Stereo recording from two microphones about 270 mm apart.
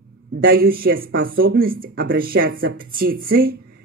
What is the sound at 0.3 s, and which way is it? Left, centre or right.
A woman's voice, right.